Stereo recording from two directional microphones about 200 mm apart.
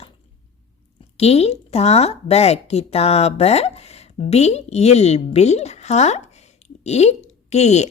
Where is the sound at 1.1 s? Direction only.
30° left (ahead or behind).